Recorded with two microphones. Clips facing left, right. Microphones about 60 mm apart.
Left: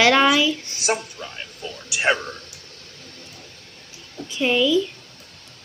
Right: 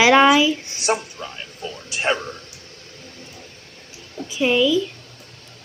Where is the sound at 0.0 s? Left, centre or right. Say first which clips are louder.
Right 3 dB; centre.